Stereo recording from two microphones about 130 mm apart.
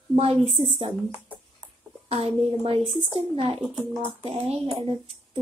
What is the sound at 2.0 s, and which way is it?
Speech, 50° right (ahead or behind).